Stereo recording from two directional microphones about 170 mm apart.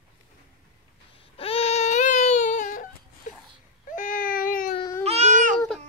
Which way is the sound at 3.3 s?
45° left (ahead or behind).